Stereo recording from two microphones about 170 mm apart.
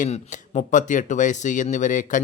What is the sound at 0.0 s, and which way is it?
Speech, 45° left (ahead or behind).